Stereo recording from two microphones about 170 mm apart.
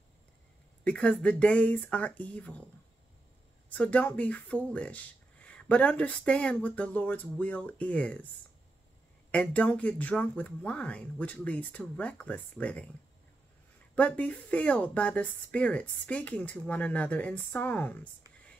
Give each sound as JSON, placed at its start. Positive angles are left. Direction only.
{"t": 0.8, "sound": "speech", "side_deg": 5}
{"t": 3.7, "sound": "speech", "side_deg": 10}
{"t": 9.3, "sound": "speech", "side_deg": 5}
{"t": 13.9, "sound": "speech", "side_deg": 10}